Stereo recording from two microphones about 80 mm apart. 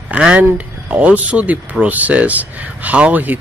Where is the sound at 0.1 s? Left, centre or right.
Centre.